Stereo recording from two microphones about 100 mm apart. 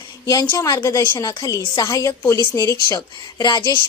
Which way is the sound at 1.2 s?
40° left (ahead or behind).